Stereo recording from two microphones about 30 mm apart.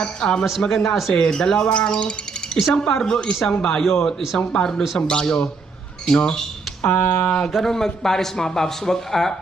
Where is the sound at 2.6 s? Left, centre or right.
Left.